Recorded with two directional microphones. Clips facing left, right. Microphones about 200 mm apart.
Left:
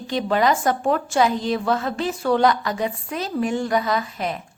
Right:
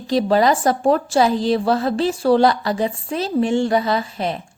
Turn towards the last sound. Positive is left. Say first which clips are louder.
# right 3 dB
turn(degrees=-30)  # may be behind; listen again after turning